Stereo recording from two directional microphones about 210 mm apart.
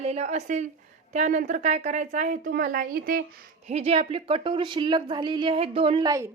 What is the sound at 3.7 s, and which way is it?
A woman's voice, 30° right (ahead or behind).